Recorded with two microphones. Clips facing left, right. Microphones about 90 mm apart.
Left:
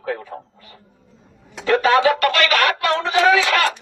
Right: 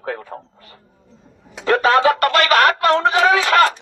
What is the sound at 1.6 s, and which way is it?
Speech, 40° right (ahead or behind).